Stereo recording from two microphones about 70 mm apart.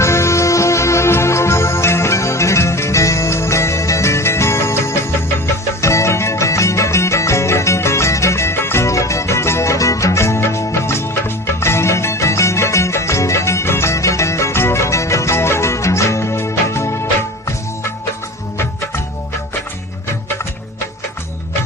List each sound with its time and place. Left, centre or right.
0.0 s music: left